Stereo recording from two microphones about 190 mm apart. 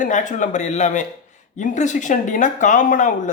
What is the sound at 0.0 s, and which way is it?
A man's voice, 40° left (ahead or behind).